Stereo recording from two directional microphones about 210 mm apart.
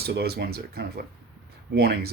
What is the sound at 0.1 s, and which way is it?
Speech, 50° right (ahead or behind).